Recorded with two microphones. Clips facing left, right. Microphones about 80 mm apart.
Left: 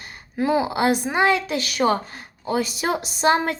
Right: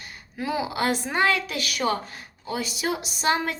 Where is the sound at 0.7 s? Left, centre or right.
Left.